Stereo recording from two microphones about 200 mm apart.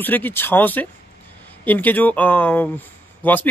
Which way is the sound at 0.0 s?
10° left (ahead or behind).